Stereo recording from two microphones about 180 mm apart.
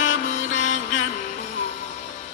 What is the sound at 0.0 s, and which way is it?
Mantra, 45° left (ahead or behind).